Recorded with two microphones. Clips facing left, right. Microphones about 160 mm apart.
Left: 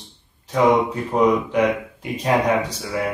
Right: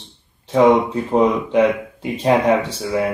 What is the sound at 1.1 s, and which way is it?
Speech, 30° right (ahead or behind).